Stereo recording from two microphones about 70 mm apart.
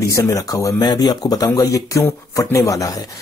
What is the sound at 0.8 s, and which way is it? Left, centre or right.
Speech, left.